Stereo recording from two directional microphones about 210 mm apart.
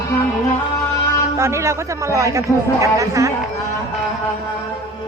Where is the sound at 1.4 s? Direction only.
15° right (ahead or behind).